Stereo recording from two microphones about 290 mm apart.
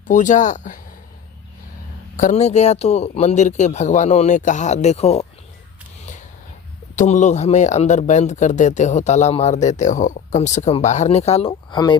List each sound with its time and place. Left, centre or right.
0.1 s speech: left
2.1 s speech: left
6.9 s speech: left